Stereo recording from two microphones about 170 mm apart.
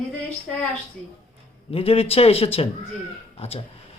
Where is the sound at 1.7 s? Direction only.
35° left (ahead or behind).